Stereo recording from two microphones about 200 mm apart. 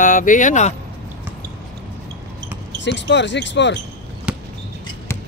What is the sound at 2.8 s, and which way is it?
Speech, 60° left (ahead or behind).